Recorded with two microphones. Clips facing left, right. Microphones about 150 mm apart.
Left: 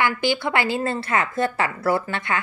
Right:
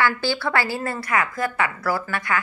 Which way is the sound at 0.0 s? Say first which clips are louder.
Left 1 dB; 20° left (ahead or behind).